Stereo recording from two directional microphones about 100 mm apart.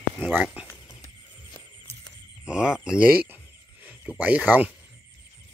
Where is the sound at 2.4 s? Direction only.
10° right (ahead or behind).